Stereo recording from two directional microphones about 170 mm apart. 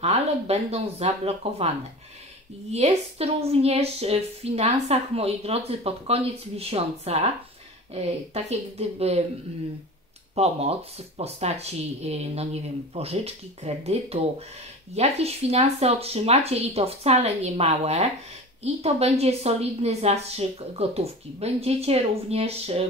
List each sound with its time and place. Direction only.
0.0 s a woman's voice: 40° right (ahead or behind)
2.7 s a woman's voice: 40° right (ahead or behind)
10.3 s a woman's voice: 40° right (ahead or behind)